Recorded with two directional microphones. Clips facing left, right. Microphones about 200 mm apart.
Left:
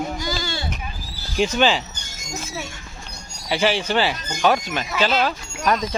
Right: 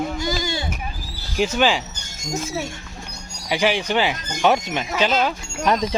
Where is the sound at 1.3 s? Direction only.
5° right (ahead or behind).